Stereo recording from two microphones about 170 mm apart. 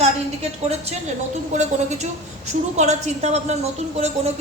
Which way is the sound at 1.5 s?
45° right (ahead or behind).